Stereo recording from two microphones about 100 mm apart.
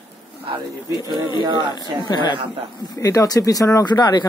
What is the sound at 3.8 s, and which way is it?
Speech, 45° left (ahead or behind).